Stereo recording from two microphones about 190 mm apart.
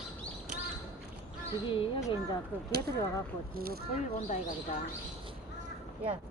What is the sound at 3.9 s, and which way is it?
Speech, 40° left (ahead or behind).